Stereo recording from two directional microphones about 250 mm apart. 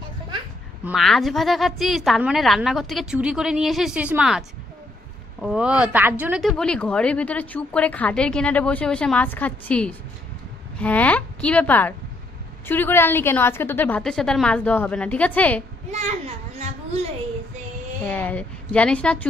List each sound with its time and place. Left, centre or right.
0.8 s a woman's voice: centre
15.9 s a child's voice: right
18.0 s a woman's voice: centre